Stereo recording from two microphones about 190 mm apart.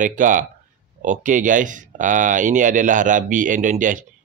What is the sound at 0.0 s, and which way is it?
Speech, 45° right (ahead or behind).